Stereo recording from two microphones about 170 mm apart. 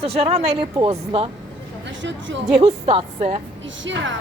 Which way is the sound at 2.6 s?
35° right (ahead or behind).